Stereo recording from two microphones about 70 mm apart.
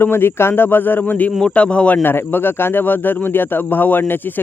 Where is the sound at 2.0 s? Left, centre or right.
Left.